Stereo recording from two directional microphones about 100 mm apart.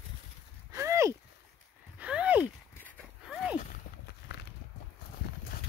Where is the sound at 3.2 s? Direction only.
Centre (ahead or behind).